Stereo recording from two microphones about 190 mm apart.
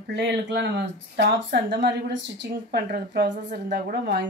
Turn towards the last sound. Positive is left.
turn(degrees=-60)  # may be behind; listen again after turning